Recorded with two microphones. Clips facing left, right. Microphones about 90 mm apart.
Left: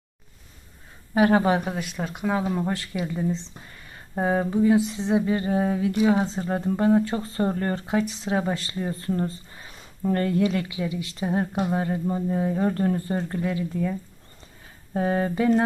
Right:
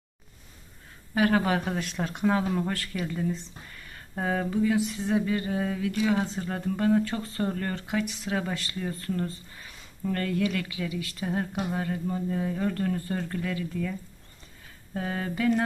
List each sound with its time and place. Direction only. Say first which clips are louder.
1.1 s speech: left 5 dB; 25° left (ahead or behind)
1.6 s speech: left 1 dB; 5° left (ahead or behind)
2.4 s speech: left 2 dB; 15° left (ahead or behind)
14.9 s a sound: left 7 dB; 30° left (ahead or behind)